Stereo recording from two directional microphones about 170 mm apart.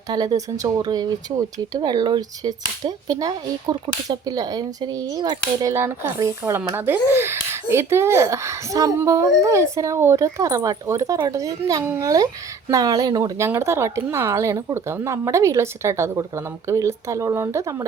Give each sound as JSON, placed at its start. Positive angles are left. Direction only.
{"t": 0.1, "sound": "speech", "side_deg": -25}